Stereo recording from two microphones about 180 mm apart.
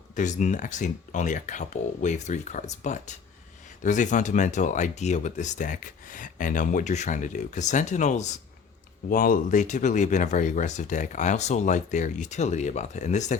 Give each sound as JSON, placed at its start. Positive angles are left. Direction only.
{"t": 0.2, "sound": "speech", "side_deg": 40}
{"t": 9.0, "sound": "speech", "side_deg": 50}